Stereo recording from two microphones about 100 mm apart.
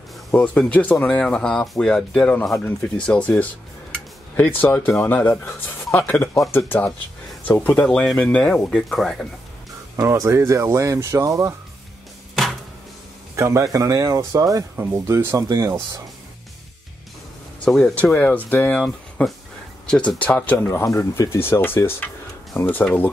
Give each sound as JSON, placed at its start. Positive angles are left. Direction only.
{"t": 0.3, "sound": "speech", "side_deg": 15}
{"t": 9.9, "sound": "speech", "side_deg": -30}
{"t": 13.4, "sound": "speech", "side_deg": -30}
{"t": 15.4, "sound": "speech", "side_deg": -35}
{"t": 17.6, "sound": "speech", "side_deg": 5}